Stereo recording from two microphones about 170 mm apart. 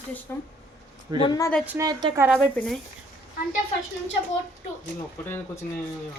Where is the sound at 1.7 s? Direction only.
20° right (ahead or behind).